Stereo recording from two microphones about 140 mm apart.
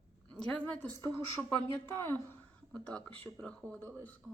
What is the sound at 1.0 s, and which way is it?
A woman's voice, 20° left (ahead or behind).